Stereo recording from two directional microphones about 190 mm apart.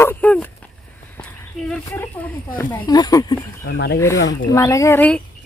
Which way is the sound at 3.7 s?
65° left (ahead or behind).